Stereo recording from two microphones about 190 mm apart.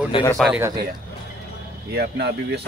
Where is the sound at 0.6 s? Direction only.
15° right (ahead or behind).